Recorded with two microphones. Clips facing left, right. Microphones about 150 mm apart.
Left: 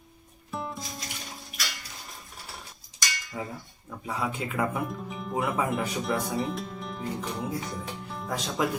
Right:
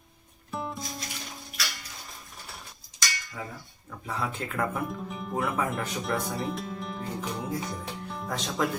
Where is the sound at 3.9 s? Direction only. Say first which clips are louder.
Left 1 dB; 10° left (ahead or behind).